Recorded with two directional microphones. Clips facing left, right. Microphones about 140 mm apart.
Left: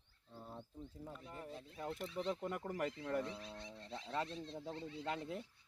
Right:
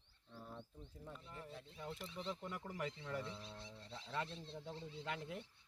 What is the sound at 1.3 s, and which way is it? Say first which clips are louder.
Speech: left 4 dB; 40° left (ahead or behind).